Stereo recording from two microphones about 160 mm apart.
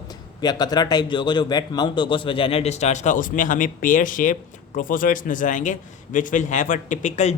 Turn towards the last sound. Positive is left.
turn(degrees=50)  # may be behind; listen again after turning